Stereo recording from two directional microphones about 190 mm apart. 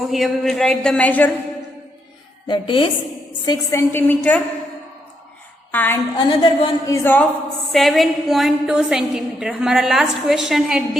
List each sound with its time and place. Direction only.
0.1 s a woman's voice: centre (ahead or behind)
2.5 s a woman's voice: 25° left (ahead or behind); by 4.4 s 10° left (ahead or behind)
5.7 s a woman's voice: 10° left (ahead or behind)
6.1 s a woman's voice: 25° left (ahead or behind)
7.7 s a woman's voice: centre (ahead or behind)